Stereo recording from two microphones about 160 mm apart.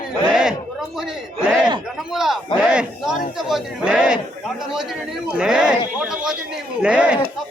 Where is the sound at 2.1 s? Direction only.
Centre (ahead or behind).